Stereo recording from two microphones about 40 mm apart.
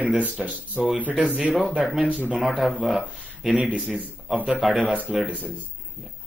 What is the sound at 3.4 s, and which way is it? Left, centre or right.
A man's voice, right.